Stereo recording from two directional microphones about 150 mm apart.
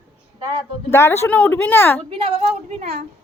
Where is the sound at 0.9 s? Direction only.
15° left (ahead or behind).